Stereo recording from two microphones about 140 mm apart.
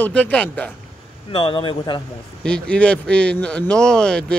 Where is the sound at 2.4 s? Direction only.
5° left (ahead or behind).